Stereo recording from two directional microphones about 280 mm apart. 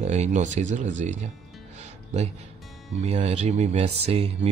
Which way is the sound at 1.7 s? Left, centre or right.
Right.